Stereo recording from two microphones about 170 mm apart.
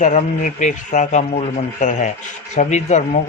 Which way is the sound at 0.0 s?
45° left (ahead or behind).